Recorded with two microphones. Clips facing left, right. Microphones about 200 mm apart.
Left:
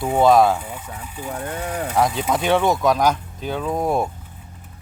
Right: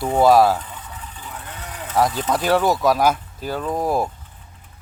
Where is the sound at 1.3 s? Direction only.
50° left (ahead or behind).